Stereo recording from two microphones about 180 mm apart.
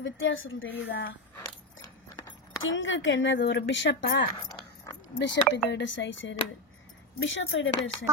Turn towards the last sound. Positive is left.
turn(degrees=90)